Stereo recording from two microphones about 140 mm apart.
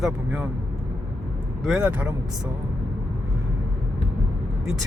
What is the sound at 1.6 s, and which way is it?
Speech, 5° right (ahead or behind).